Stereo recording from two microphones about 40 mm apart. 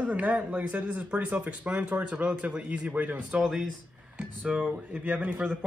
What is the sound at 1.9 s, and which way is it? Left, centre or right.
Speech, right.